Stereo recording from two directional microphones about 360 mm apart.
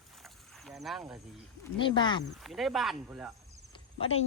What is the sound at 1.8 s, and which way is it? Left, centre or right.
Speech, centre.